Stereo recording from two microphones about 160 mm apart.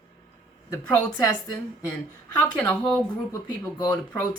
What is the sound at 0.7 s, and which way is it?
Speech, 15° left (ahead or behind).